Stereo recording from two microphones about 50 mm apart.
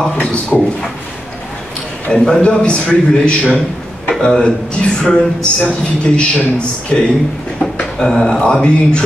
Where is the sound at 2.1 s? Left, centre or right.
Centre.